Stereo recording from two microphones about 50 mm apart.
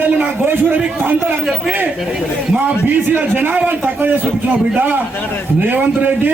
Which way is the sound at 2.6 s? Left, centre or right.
Right.